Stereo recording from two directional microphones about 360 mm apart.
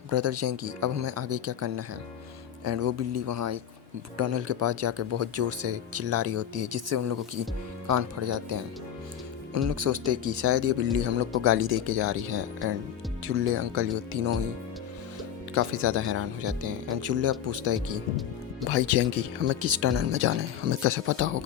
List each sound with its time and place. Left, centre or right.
0.1 s speech: right
15.5 s speech: right